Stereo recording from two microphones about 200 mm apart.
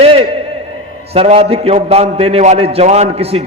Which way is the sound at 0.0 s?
30° right (ahead or behind).